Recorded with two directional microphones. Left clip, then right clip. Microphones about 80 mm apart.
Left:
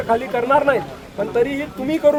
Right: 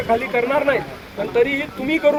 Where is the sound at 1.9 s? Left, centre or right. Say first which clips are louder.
Left 1 dB; left.